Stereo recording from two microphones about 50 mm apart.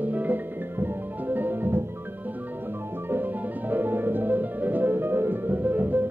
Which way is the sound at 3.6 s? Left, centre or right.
Right.